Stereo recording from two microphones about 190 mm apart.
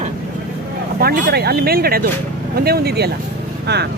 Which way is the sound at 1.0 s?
55° right (ahead or behind).